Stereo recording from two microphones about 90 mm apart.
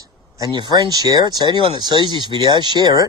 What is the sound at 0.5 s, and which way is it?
Speech, 55° right (ahead or behind).